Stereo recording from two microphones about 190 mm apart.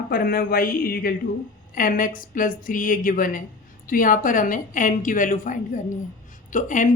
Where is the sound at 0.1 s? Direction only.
50° left (ahead or behind).